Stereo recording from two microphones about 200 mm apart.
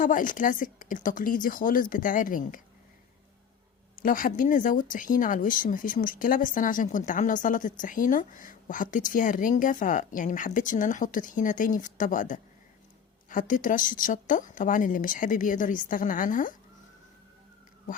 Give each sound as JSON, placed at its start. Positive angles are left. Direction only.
{"t": 0.0, "sound": "speech", "side_deg": 40}
{"t": 4.0, "sound": "speech", "side_deg": 45}